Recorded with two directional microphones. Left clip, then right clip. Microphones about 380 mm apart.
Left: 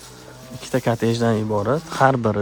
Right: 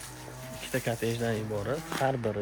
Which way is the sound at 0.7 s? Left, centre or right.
Left.